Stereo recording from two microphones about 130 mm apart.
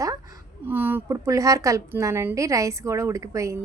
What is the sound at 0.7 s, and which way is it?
Speech, 15° right (ahead or behind).